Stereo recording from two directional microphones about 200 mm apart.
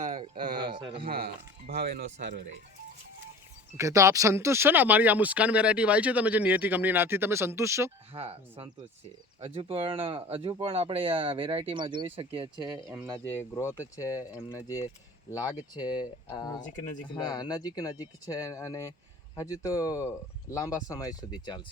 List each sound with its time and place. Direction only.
0.6 s speech: 25° right (ahead or behind)
1.0 s speech: 50° right (ahead or behind)
3.8 s speech: 15° right (ahead or behind)
8.1 s speech: 25° right (ahead or behind)
13.2 s speech: 10° left (ahead or behind)